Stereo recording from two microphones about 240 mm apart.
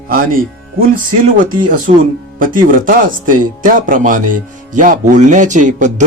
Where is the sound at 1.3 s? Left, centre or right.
Right.